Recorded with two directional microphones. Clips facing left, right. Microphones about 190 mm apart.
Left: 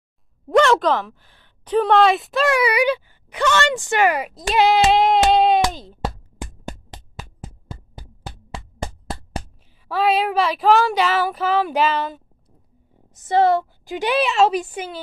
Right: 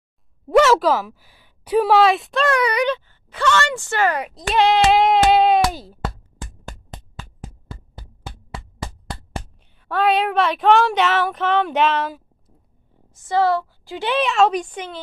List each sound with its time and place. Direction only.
0.5 s speech: 5° right (ahead or behind); by 4.2 s 15° left (ahead or behind)
4.2 s speech: 5° left (ahead or behind)
6.0 s music: 15° left (ahead or behind)
9.8 s speech: centre (ahead or behind)
13.1 s a woman's voice: 20° left (ahead or behind)